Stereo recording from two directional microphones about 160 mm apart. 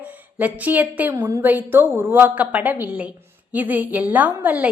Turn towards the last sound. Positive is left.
turn(degrees=-10)  # may be behind; listen again after turning